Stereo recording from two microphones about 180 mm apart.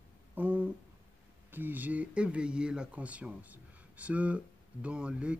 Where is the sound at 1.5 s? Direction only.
10° right (ahead or behind).